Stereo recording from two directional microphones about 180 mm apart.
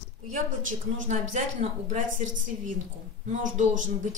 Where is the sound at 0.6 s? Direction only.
45° right (ahead or behind).